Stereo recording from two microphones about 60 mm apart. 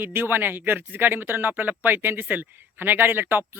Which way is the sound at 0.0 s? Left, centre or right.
Right.